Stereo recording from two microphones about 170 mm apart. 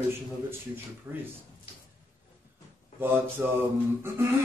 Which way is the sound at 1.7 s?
35° left (ahead or behind).